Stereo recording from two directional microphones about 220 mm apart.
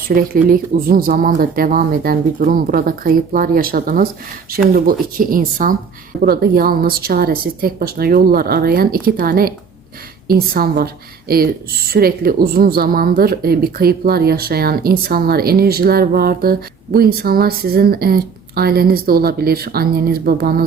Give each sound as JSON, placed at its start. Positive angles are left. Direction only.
{"t": 0.1, "sound": "a woman's voice", "side_deg": -40}
{"t": 5.1, "sound": "a woman's voice", "side_deg": -40}